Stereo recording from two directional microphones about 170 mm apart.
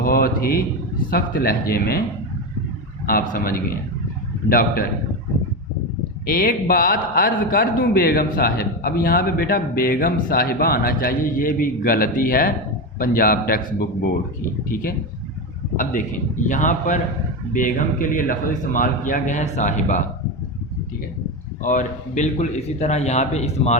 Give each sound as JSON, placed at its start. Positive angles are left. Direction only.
{"t": 0.0, "sound": "a man's voice", "side_deg": 60}
{"t": 3.1, "sound": "a man's voice", "side_deg": 55}
{"t": 6.2, "sound": "a man's voice", "side_deg": 60}
{"t": 14.7, "sound": "a man's voice", "side_deg": 55}
{"t": 21.6, "sound": "a man's voice", "side_deg": 50}